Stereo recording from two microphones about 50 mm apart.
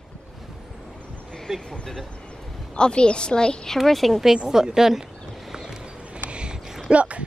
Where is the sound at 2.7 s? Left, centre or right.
Centre.